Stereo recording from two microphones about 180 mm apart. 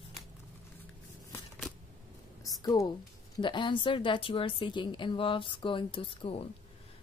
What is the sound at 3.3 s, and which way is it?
A woman's voice, 25° left (ahead or behind).